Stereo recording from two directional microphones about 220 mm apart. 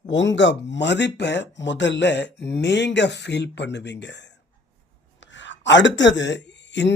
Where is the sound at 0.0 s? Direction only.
55° left (ahead or behind).